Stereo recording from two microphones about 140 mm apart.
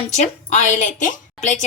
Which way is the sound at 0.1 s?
55° left (ahead or behind).